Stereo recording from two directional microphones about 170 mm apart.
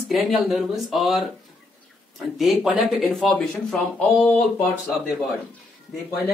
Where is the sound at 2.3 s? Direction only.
Centre (ahead or behind).